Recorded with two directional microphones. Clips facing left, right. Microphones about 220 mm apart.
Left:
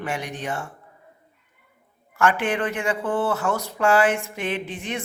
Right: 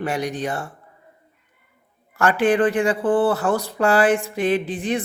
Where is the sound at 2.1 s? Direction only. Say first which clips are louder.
Right 5 dB; 35° right (ahead or behind).